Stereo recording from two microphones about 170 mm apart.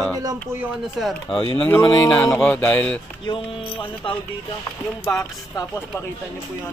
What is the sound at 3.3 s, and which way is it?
Music, 30° left (ahead or behind).